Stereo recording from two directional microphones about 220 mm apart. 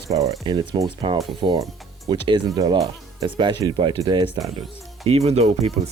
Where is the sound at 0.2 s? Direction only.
15° right (ahead or behind).